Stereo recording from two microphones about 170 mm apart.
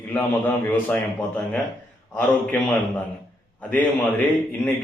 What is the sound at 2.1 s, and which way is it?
A man's voice, 10° left (ahead or behind).